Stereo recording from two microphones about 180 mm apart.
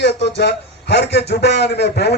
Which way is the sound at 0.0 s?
70° left (ahead or behind).